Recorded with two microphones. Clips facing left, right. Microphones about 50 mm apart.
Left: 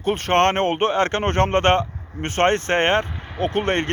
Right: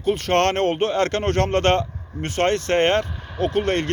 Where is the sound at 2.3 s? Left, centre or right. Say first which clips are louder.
Left 1 dB; left.